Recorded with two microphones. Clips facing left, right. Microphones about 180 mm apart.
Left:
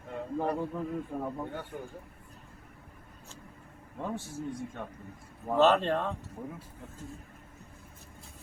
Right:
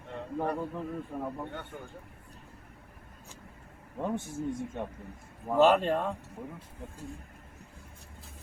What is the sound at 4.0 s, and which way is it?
Speech, 20° right (ahead or behind).